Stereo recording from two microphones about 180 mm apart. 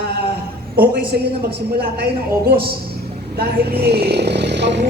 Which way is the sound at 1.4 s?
60° right (ahead or behind).